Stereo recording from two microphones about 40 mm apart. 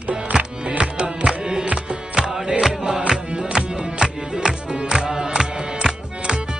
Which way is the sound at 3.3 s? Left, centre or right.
Right.